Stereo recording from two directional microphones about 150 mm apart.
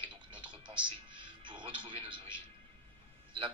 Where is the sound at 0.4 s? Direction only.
30° right (ahead or behind).